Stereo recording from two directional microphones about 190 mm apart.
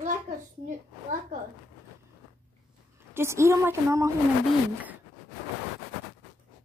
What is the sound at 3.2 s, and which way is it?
Speech, 15° right (ahead or behind).